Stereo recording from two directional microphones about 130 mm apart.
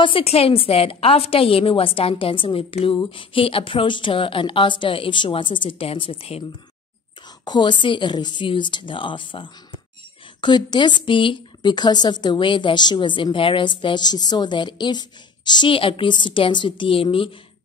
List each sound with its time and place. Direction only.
0.0 s a woman's voice: 45° left (ahead or behind)
7.4 s speech: 35° left (ahead or behind)